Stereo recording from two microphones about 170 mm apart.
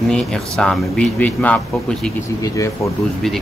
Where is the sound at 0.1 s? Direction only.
5° left (ahead or behind).